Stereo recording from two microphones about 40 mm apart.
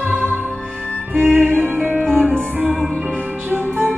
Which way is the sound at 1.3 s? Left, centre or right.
Right.